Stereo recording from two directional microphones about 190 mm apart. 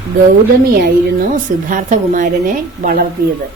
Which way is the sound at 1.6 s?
45° right (ahead or behind).